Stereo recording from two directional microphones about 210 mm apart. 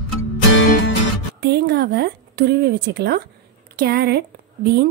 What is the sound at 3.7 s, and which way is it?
Speech, 50° right (ahead or behind).